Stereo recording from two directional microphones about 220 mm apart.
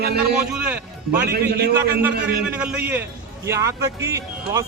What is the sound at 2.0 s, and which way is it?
Speech, 5° right (ahead or behind).